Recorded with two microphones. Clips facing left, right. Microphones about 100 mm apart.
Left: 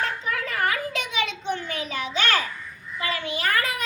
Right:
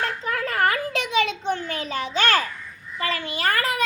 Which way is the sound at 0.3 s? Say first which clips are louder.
Right 5 dB; 45° right (ahead or behind).